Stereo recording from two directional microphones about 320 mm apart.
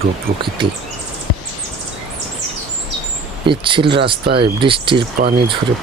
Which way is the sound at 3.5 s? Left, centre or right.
Centre.